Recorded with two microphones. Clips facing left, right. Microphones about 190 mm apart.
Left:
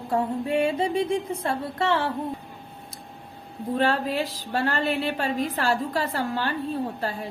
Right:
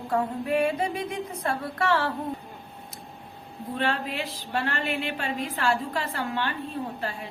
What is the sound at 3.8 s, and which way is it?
A woman's voice, 40° left (ahead or behind).